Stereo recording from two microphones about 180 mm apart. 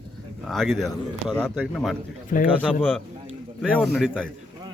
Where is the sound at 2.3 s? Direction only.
50° left (ahead or behind).